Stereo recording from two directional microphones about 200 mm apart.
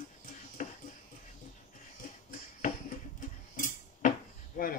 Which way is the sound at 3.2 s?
40° left (ahead or behind).